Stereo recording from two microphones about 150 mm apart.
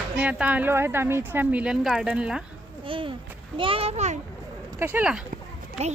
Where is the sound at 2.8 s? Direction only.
35° right (ahead or behind).